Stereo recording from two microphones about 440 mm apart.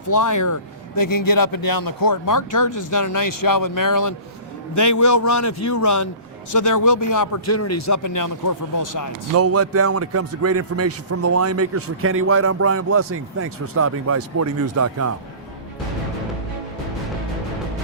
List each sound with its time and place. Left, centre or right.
0.1 s a man's voice: left
9.3 s a man's voice: right